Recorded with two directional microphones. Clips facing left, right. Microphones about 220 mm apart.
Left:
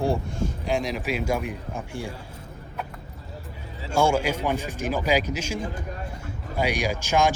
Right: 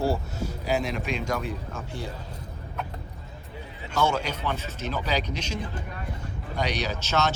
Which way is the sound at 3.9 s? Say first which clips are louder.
Left 4 dB; 10° left (ahead or behind).